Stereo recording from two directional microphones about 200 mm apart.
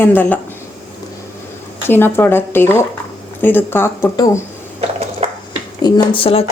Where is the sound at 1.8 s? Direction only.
10° left (ahead or behind).